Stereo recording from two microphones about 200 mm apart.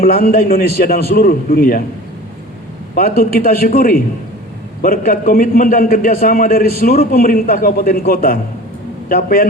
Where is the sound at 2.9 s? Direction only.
50° left (ahead or behind).